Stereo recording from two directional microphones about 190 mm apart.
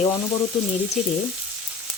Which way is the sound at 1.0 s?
Centre (ahead or behind).